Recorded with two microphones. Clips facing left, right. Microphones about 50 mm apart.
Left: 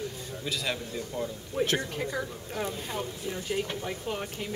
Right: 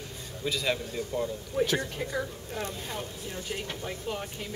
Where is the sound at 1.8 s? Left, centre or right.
Centre.